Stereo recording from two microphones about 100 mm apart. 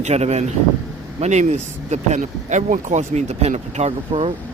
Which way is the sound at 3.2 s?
90° right.